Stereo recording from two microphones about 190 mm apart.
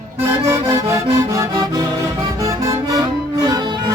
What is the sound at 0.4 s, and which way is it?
Accordion, 20° right (ahead or behind).